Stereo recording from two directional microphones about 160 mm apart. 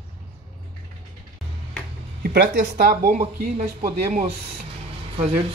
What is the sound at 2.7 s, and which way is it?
Speech, 65° right (ahead or behind).